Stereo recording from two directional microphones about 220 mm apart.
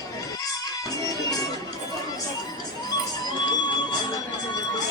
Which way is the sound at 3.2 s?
20° left (ahead or behind).